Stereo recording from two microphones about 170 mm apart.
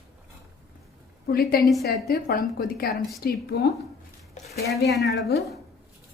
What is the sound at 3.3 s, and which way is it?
Speech, 70° left (ahead or behind).